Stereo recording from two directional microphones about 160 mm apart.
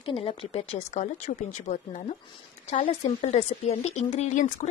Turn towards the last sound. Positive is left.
turn(degrees=45)  # may be behind; listen again after turning